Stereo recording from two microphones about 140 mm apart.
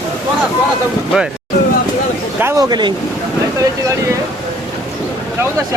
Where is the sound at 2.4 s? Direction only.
20° right (ahead or behind).